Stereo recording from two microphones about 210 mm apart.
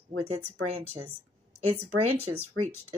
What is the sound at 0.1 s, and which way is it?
A woman's voice, 90° right.